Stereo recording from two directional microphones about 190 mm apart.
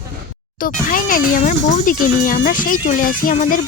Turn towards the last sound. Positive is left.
turn(degrees=45)  # may be behind; listen again after turning